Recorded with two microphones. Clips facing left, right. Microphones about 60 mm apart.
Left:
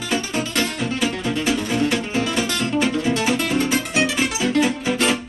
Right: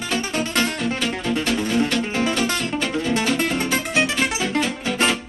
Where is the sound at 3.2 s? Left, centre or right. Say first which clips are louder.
Left 1 dB; centre.